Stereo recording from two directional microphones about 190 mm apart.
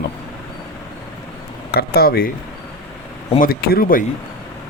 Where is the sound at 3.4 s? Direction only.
50° left (ahead or behind).